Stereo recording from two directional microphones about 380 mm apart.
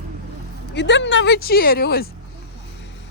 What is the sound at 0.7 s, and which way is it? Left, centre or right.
A woman's voice, left.